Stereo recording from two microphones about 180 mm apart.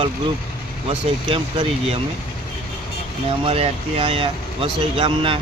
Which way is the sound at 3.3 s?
35° right (ahead or behind).